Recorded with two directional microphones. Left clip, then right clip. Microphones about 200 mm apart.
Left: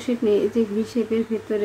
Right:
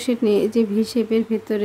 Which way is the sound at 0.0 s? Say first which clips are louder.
Right 1 dB; 55° right (ahead or behind).